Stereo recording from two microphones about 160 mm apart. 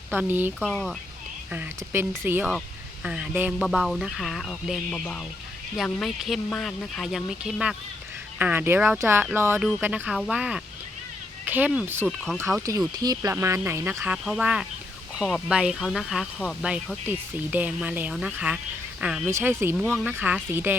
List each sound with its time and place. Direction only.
0.1 s speech: 10° right (ahead or behind)
0.6 s speech: 5° left (ahead or behind)
1.5 s speech: 15° right (ahead or behind)
12.0 s speech: 5° left (ahead or behind)
13.0 s speech: 25° right (ahead or behind)
19.7 s speech: centre (ahead or behind)
20.1 s speech: 10° right (ahead or behind)